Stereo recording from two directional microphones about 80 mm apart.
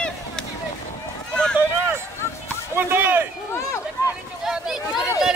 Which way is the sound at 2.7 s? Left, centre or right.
Right.